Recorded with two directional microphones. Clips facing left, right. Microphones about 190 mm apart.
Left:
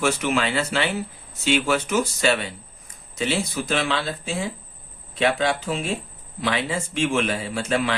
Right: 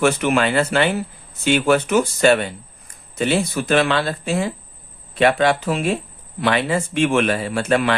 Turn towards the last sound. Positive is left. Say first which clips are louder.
# right 5 dB
turn(degrees=-65)  # may be behind; listen again after turning